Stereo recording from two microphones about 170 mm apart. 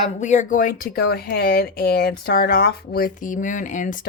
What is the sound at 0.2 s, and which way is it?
A woman's voice, 45° left (ahead or behind).